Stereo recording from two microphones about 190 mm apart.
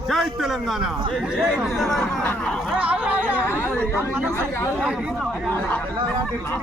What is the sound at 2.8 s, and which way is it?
Speech, 5° right (ahead or behind).